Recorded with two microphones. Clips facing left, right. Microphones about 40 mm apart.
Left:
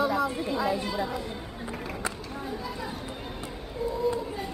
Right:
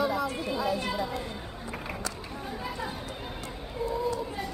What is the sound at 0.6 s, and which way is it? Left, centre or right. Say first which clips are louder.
Speech: left 1 dB; left.